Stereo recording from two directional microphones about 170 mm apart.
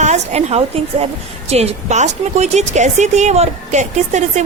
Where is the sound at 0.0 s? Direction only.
40° right (ahead or behind).